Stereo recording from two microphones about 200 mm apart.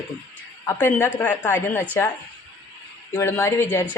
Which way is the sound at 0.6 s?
10° left (ahead or behind).